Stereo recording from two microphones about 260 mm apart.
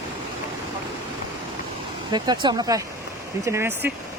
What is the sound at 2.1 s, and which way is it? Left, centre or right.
Speech, centre.